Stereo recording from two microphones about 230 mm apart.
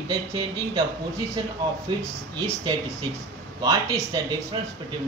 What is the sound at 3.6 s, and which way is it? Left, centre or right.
Speech, centre.